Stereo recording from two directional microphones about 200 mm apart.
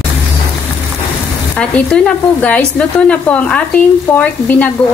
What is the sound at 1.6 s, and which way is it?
Speech, 5° left (ahead or behind).